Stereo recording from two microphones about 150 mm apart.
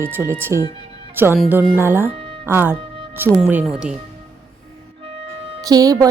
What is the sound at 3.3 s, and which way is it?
Speech, 5° right (ahead or behind).